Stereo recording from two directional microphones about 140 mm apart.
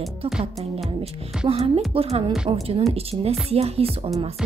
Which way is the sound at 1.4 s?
45° right (ahead or behind).